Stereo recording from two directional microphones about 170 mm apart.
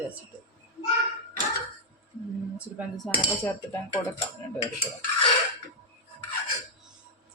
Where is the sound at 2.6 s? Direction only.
10° right (ahead or behind).